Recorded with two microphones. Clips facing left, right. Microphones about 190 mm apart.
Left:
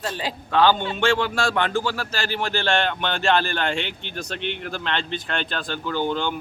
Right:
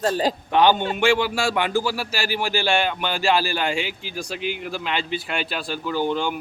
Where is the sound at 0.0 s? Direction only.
40° right (ahead or behind).